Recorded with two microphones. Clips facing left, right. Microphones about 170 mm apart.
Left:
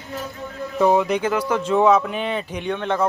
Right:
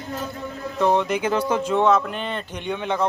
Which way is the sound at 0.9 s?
Centre (ahead or behind).